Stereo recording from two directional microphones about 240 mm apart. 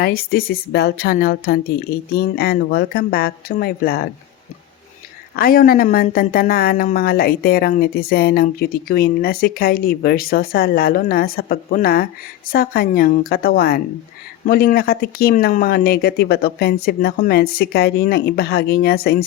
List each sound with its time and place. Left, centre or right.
0.0 s speech: left
5.4 s speech: left